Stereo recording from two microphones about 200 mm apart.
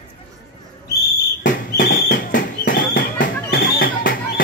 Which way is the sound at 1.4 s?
45° left (ahead or behind).